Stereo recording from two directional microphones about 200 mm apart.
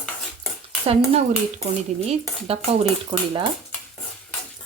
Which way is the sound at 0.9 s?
35° right (ahead or behind).